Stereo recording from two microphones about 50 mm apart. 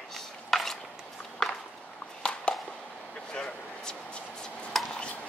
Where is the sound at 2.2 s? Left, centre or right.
Centre.